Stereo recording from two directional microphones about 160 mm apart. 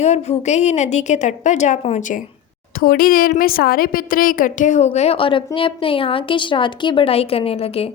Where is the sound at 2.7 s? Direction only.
65° left (ahead or behind).